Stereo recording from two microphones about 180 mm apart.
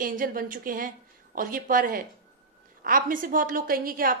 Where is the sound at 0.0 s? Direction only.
50° right (ahead or behind).